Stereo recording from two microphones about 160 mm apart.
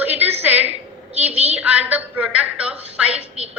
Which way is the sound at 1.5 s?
10° right (ahead or behind).